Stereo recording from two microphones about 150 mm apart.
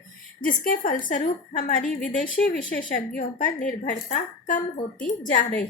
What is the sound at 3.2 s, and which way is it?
A woman's voice, 60° left (ahead or behind).